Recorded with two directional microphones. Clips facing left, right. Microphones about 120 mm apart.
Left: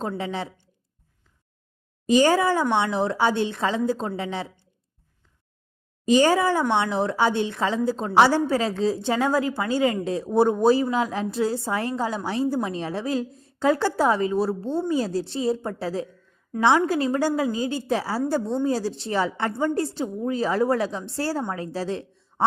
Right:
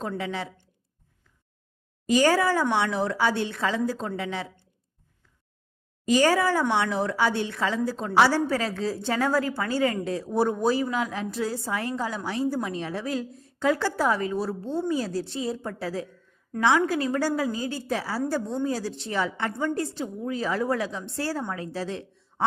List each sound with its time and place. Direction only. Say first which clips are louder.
0.2 s a woman's voice: left 2 dB; 30° left (ahead or behind)
2.0 s a woman's voice: left 2 dB; 25° left (ahead or behind)
6.1 s a woman's voice: left 3 dB; 25° left (ahead or behind)